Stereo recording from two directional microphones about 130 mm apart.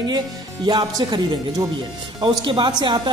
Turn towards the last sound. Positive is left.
turn(degrees=-35)  # may be behind; listen again after turning